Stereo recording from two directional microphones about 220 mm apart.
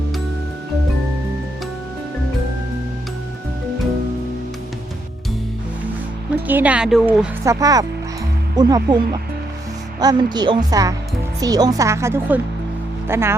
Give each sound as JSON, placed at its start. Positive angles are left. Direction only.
{"t": 6.5, "sound": "speech", "side_deg": -5}
{"t": 7.4, "sound": "speech", "side_deg": -15}
{"t": 10.0, "sound": "speech", "side_deg": -20}